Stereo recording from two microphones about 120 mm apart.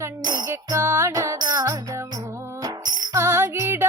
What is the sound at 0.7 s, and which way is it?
Music, 20° right (ahead or behind).